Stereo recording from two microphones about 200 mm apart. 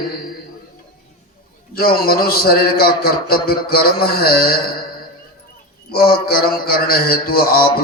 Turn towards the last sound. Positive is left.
turn(degrees=50)  # may be behind; listen again after turning